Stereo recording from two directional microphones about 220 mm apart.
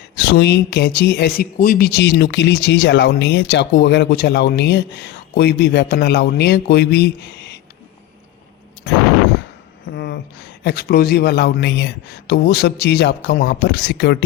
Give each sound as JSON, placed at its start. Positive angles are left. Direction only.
{"t": 0.2, "sound": "speech", "side_deg": 50}
{"t": 1.5, "sound": "speech", "side_deg": 40}
{"t": 9.9, "sound": "speech", "side_deg": 50}